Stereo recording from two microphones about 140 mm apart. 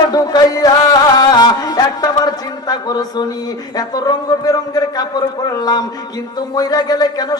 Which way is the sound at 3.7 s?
30° left (ahead or behind).